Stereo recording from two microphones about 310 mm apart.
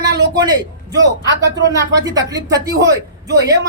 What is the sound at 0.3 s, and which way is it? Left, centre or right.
A man's voice, centre.